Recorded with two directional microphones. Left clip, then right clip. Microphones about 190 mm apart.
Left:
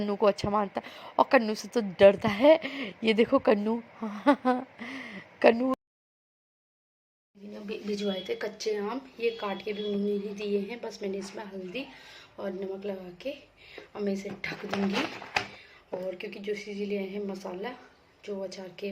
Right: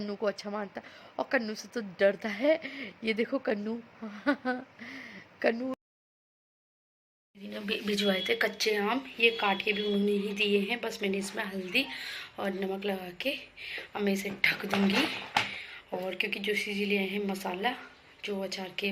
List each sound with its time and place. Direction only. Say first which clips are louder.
0.1 s speech: left 8 dB; 20° left (ahead or behind)
7.5 s speech: right 3 dB; centre (ahead or behind)